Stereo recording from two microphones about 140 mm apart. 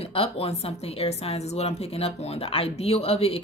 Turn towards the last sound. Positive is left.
turn(degrees=45)  # may be behind; listen again after turning